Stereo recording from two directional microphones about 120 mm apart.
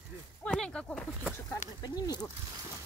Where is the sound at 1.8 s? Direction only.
35° left (ahead or behind).